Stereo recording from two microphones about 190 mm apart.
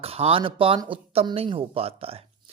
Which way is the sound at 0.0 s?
30° right (ahead or behind).